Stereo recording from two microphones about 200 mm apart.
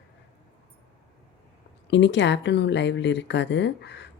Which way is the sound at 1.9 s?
60° left (ahead or behind).